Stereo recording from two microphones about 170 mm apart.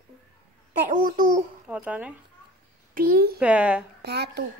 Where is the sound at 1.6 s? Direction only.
10° right (ahead or behind).